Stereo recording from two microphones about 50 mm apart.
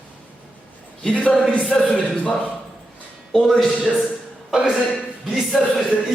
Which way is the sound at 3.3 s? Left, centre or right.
Centre.